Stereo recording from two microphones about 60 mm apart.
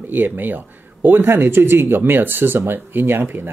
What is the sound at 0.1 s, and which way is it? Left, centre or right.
Speech, right.